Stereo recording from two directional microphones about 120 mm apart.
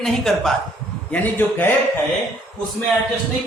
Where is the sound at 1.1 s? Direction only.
15° left (ahead or behind).